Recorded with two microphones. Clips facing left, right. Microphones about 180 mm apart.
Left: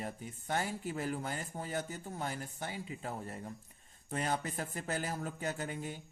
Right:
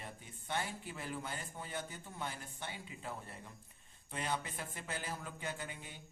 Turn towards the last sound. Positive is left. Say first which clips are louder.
# left 7 dB
turn(degrees=45)  # may be behind; listen again after turning